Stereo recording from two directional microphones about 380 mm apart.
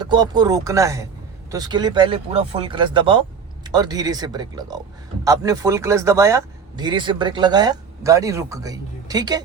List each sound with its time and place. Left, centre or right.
0.0 s speech: centre